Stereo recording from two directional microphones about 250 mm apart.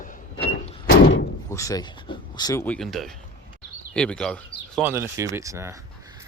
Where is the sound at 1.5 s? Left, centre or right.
Centre.